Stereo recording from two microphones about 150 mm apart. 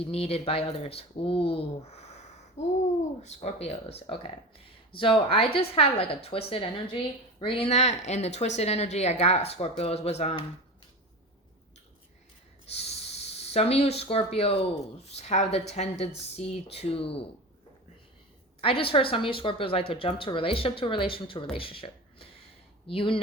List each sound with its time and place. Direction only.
0.0 s a woman's voice: 40° left (ahead or behind)
12.7 s a woman's voice: 45° left (ahead or behind)
18.6 s speech: 40° left (ahead or behind)